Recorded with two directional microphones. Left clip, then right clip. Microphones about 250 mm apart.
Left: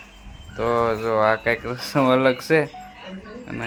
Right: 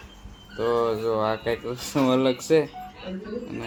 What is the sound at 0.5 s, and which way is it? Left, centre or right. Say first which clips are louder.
Speech: left 2 dB; centre.